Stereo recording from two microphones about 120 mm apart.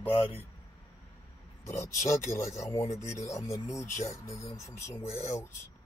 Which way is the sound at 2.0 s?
25° left (ahead or behind).